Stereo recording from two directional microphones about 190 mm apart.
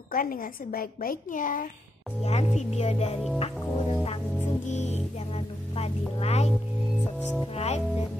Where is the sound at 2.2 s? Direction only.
35° left (ahead or behind).